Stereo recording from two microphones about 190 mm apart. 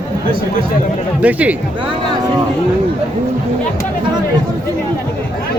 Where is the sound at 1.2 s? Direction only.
5° right (ahead or behind).